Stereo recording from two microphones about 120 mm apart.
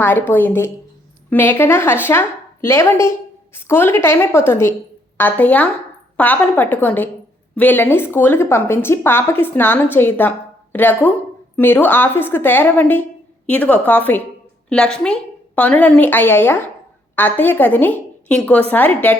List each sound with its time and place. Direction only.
0.0 s a woman's voice: 15° left (ahead or behind)